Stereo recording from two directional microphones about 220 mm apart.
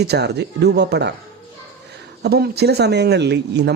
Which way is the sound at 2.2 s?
45° right (ahead or behind).